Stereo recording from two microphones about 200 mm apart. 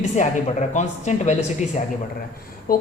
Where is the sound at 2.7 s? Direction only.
45° left (ahead or behind).